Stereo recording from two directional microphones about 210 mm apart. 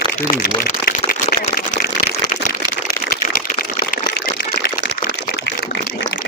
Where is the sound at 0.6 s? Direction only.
45° left (ahead or behind).